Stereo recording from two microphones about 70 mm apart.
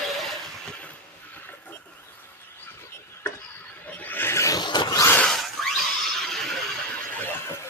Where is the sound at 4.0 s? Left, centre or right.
Left.